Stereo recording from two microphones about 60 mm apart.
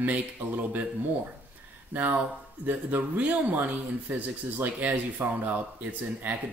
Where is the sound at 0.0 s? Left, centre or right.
Right.